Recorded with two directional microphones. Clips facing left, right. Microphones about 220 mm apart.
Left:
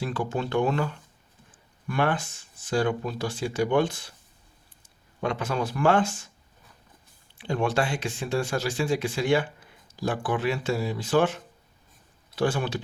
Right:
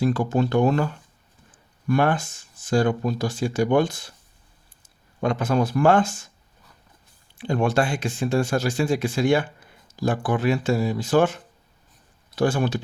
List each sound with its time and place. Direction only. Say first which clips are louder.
0.0 s speech: right 7 dB; 40° right (ahead or behind)
1.9 s speech: right 5 dB; 45° right (ahead or behind)
5.2 s speech: right 6 dB; 45° right (ahead or behind)
7.3 s speech: right 4 dB; 45° right (ahead or behind)
12.4 s speech: right 4 dB; 45° right (ahead or behind)